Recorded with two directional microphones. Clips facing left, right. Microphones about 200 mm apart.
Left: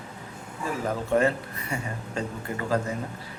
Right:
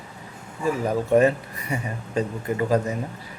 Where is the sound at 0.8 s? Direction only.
15° right (ahead or behind).